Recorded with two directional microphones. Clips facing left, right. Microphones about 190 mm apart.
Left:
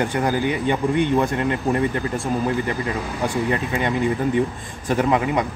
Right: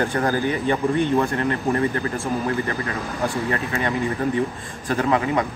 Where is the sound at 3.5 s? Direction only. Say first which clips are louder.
Left 2 dB; 20° left (ahead or behind).